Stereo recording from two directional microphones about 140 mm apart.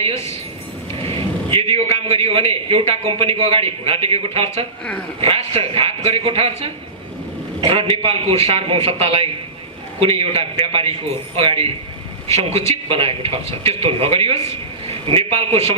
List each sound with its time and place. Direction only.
1.5 s a man's voice: 40° right (ahead or behind)
12.3 s a man's voice: 50° right (ahead or behind)